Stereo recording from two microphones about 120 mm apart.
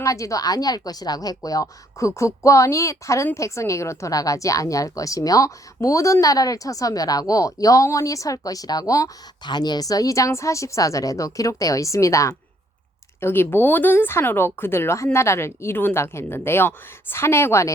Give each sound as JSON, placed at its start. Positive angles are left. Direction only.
{"t": 0.0, "sound": "a woman's voice", "side_deg": 25}